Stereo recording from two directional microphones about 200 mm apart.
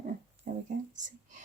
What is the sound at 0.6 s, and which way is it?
Speech, 40° right (ahead or behind).